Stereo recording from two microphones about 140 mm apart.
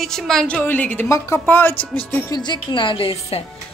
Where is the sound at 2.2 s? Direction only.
30° left (ahead or behind).